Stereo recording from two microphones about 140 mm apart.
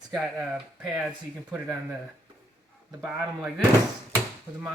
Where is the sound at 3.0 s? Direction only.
Centre (ahead or behind).